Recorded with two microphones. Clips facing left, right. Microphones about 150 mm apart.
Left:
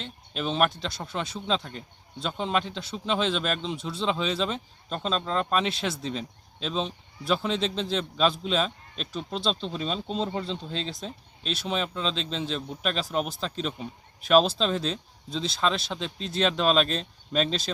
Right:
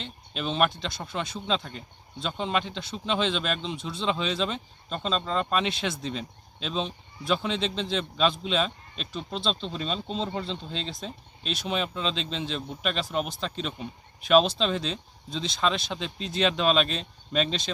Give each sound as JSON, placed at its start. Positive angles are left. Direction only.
{"t": 0.0, "sound": "speech", "side_deg": 0}